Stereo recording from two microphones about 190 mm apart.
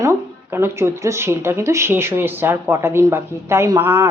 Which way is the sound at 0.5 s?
15° right (ahead or behind).